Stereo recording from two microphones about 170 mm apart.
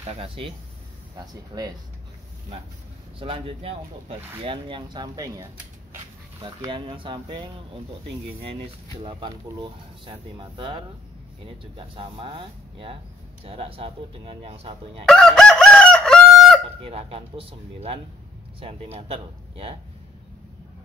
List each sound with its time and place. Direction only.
0.0 s speech: 35° right (ahead or behind)
1.1 s speech: 20° right (ahead or behind)
3.2 s speech: 30° right (ahead or behind)
9.0 s speech: 30° right (ahead or behind)
15.0 s chicken: 5° left (ahead or behind)
16.8 s speech: 35° right (ahead or behind)